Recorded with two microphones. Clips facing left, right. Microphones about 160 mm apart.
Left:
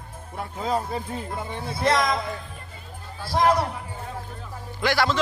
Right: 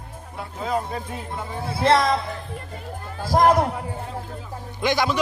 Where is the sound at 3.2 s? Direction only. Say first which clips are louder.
Right 4 dB; 45° right (ahead or behind).